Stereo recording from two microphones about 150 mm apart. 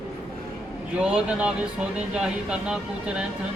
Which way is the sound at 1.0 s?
5° right (ahead or behind).